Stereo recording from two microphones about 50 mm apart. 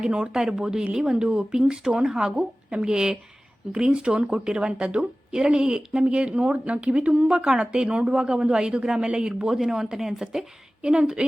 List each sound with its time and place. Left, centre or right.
0.1 s speech: centre